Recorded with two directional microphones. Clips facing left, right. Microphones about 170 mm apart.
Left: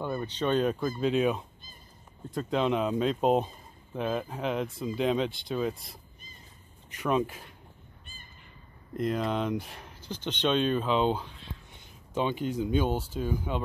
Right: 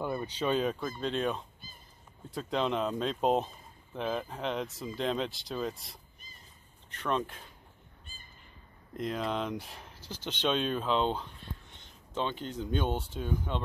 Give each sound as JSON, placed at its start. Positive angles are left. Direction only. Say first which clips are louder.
{"t": 0.0, "sound": "speech", "louder": "left 2 dB", "side_deg": -10}
{"t": 8.9, "sound": "speech", "louder": "left 4 dB", "side_deg": 0}
{"t": 11.2, "sound": "speech", "louder": "left 1 dB", "side_deg": 90}
{"t": 11.7, "sound": "speech", "louder": "left 5 dB", "side_deg": 10}